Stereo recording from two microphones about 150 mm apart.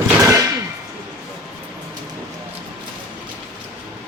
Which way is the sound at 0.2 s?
20° right (ahead or behind).